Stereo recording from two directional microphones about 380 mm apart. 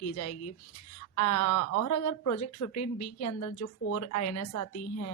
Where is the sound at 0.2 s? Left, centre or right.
Left.